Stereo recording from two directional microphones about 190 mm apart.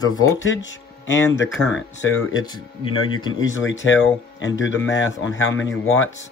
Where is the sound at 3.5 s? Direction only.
85° left.